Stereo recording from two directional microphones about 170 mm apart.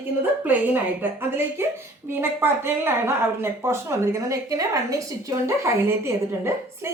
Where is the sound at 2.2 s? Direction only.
15° right (ahead or behind).